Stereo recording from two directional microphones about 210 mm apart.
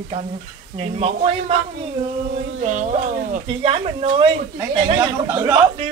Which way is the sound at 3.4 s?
25° right (ahead or behind).